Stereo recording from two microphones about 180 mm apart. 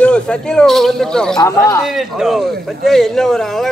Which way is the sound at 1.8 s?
Centre (ahead or behind).